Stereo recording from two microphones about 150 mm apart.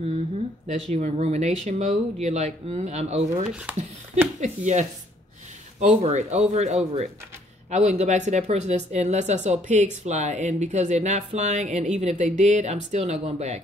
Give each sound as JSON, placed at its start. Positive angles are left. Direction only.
{"t": 0.7, "sound": "speech", "side_deg": -50}
{"t": 3.7, "sound": "speech", "side_deg": -10}
{"t": 4.4, "sound": "speech", "side_deg": -50}
{"t": 6.0, "sound": "speech", "side_deg": -50}